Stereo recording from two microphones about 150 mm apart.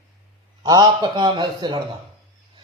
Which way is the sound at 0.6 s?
30° right (ahead or behind).